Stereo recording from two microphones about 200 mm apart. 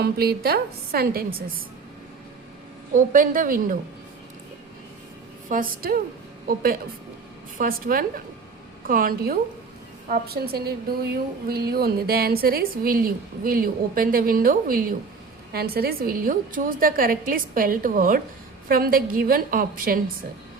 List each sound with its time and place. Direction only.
0.0 s a woman's voice: 50° right (ahead or behind)
2.9 s a woman's voice: 45° right (ahead or behind)
5.5 s a woman's voice: 45° right (ahead or behind)